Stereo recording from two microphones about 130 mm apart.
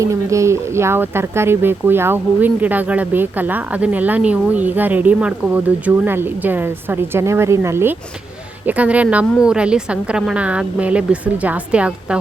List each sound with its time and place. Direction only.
0.0 s a woman's voice: 25° right (ahead or behind)